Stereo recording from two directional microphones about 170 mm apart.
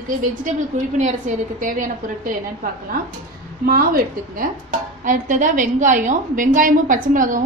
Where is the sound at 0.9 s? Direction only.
45° right (ahead or behind).